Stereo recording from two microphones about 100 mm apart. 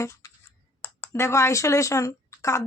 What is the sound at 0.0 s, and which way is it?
Speech, 30° left (ahead or behind).